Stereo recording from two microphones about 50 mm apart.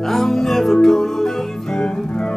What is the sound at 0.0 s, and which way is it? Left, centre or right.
Music, centre.